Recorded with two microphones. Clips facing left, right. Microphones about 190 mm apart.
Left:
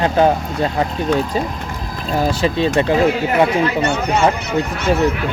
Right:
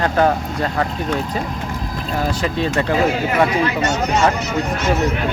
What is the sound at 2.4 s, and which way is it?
Speech, 25° left (ahead or behind).